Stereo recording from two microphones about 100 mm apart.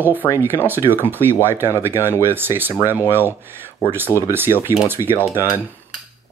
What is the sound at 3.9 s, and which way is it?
Speech, 20° right (ahead or behind).